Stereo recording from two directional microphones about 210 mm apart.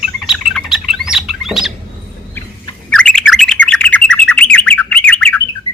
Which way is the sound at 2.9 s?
5° left (ahead or behind).